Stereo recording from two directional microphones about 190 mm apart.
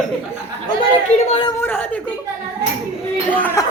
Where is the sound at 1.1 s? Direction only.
30° left (ahead or behind).